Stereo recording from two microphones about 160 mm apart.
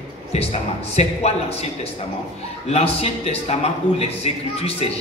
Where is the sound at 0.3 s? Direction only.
40° left (ahead or behind).